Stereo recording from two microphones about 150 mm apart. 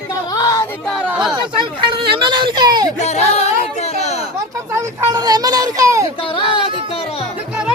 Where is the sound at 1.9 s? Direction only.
35° right (ahead or behind).